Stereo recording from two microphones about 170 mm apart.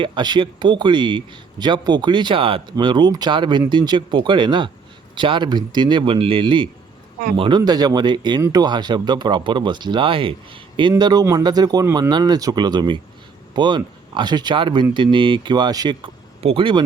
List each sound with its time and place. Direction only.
0.0 s speech: 25° right (ahead or behind)